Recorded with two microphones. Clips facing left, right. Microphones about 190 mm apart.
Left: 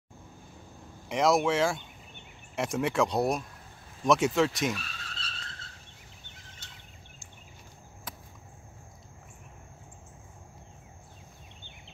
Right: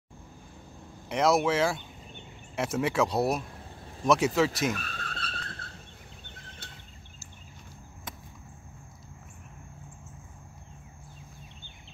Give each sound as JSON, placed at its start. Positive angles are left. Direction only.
{"t": 1.0, "sound": "speech", "side_deg": 0}
{"t": 4.7, "sound": "vehicle", "side_deg": -55}
{"t": 6.6, "sound": "a sound", "side_deg": -60}